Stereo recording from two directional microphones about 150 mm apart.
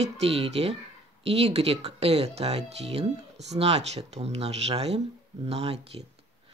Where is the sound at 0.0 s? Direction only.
40° right (ahead or behind).